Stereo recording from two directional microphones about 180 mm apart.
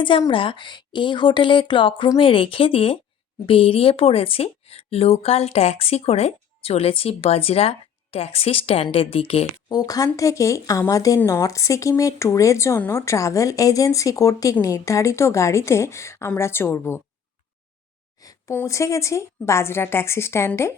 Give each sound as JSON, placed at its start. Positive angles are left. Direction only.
{"t": 0.0, "sound": "a woman's voice", "side_deg": 30}
{"t": 18.2, "sound": "speech", "side_deg": 20}